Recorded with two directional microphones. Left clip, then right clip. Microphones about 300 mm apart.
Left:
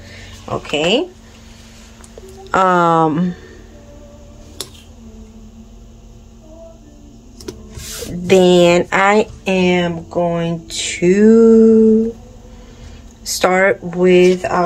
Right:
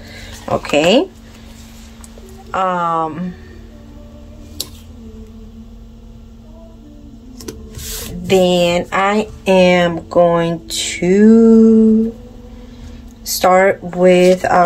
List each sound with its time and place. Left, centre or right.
0.7 s speech: centre
2.5 s speech: left
8.3 s speech: centre
13.2 s speech: centre